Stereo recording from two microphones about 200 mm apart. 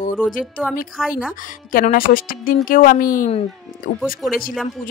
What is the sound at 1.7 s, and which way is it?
Speech, 45° left (ahead or behind).